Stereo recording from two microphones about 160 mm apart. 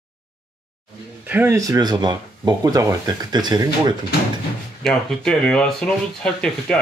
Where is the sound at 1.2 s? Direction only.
10° right (ahead or behind).